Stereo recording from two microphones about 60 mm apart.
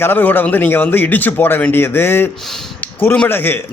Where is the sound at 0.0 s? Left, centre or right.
Left.